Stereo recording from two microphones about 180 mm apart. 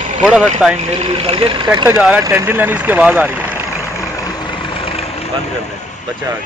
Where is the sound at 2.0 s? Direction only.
5° right (ahead or behind).